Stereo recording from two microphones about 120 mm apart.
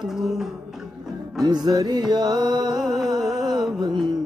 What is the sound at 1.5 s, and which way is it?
Music, 35° right (ahead or behind).